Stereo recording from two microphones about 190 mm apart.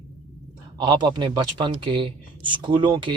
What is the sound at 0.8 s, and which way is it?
Speech, 25° right (ahead or behind).